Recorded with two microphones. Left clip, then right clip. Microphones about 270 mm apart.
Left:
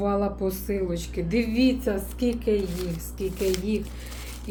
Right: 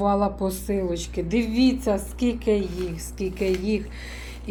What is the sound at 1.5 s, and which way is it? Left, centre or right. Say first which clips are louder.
Speech: right 2 dB; right.